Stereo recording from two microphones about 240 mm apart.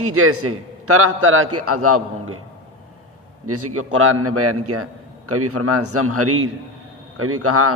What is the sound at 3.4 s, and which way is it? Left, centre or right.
A man's voice, right.